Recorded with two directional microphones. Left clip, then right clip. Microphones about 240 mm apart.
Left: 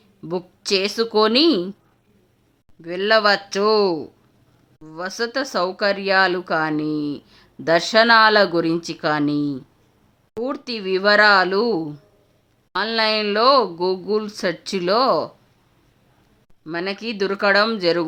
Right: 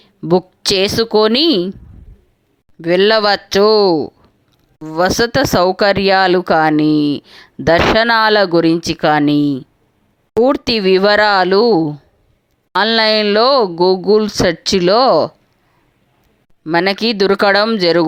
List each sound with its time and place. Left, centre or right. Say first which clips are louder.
0.0 s a woman's voice: right 13 dB; right
2.8 s speech: right 6 dB; right
16.7 s speech: right 12 dB; right